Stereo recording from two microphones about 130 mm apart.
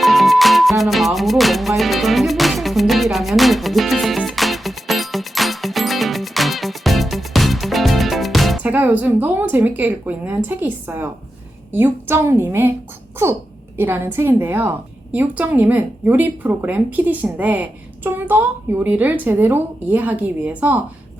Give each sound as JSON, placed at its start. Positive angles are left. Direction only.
{"t": 0.0, "sound": "music", "side_deg": 0}
{"t": 8.6, "sound": "a woman's voice", "side_deg": -10}
{"t": 13.7, "sound": "a woman's voice", "side_deg": -15}